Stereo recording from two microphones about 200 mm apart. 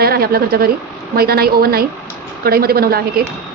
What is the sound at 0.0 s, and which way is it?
A woman's voice, 50° right (ahead or behind).